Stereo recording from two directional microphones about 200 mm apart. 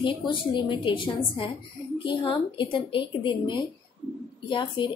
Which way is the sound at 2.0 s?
25° left (ahead or behind).